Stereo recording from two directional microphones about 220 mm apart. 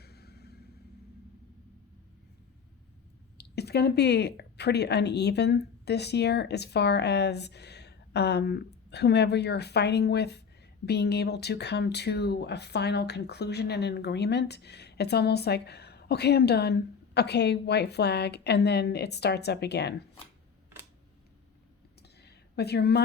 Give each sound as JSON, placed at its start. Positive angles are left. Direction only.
{"t": 0.0, "sound": "vehicle", "side_deg": 45}
{"t": 3.3, "sound": "speech", "side_deg": 50}
{"t": 22.0, "sound": "a sound", "side_deg": 50}